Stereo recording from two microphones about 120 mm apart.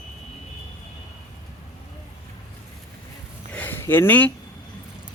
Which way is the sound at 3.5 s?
15° left (ahead or behind).